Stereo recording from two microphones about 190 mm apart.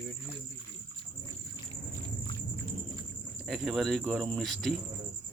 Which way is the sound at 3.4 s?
Centre (ahead or behind).